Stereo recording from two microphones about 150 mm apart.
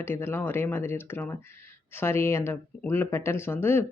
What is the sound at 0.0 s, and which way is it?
Speech, 15° left (ahead or behind).